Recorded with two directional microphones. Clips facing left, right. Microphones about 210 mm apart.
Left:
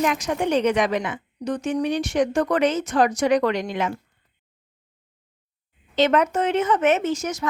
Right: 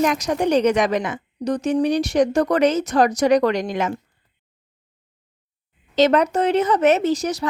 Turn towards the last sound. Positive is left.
turn(degrees=-35)  # may be behind; listen again after turning